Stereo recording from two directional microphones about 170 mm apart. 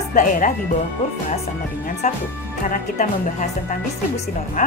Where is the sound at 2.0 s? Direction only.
50° left (ahead or behind).